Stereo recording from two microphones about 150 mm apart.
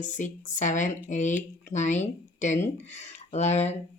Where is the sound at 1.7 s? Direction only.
55° left (ahead or behind).